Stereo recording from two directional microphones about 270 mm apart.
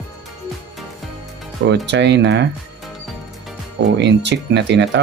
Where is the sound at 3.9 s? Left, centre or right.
Right.